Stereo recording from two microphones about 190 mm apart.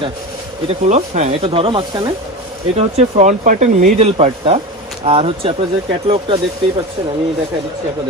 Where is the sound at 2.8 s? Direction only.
35° right (ahead or behind).